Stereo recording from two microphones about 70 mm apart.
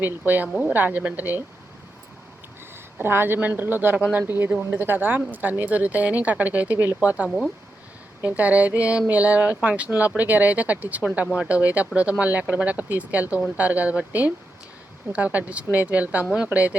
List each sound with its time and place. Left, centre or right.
0.0 s speech: right
3.0 s speech: right
7.3 s speech: centre
8.2 s speech: right